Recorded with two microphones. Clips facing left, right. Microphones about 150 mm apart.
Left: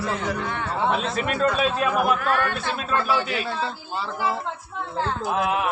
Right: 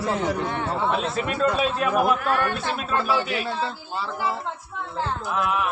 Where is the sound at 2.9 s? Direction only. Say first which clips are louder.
Left 1 dB; 5° right (ahead or behind).